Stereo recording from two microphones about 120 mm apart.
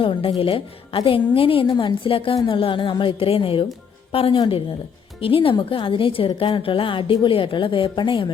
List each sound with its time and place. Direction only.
0.0 s a woman's voice: 45° left (ahead or behind)